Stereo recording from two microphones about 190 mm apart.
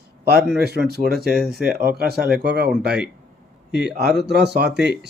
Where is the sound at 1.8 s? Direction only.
55° right (ahead or behind).